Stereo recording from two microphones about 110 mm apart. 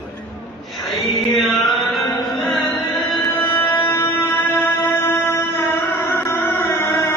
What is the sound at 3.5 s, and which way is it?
Music, 20° left (ahead or behind).